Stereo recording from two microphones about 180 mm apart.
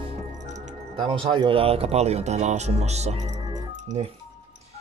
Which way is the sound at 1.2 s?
25° right (ahead or behind).